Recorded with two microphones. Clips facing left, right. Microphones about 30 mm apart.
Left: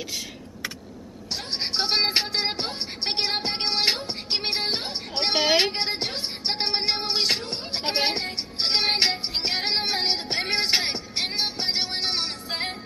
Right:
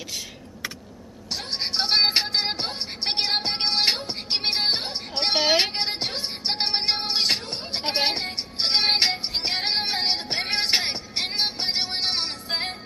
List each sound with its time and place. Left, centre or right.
1.3 s music: centre
5.1 s a sound: centre
5.7 s music: centre